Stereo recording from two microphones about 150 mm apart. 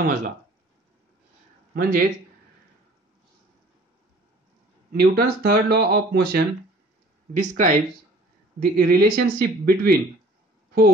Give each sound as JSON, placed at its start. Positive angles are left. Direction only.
{"t": 0.0, "sound": "speech", "side_deg": -55}
{"t": 1.8, "sound": "speech", "side_deg": -65}
{"t": 4.9, "sound": "speech", "side_deg": -90}
{"t": 7.3, "sound": "speech", "side_deg": -60}
{"t": 8.5, "sound": "speech", "side_deg": -80}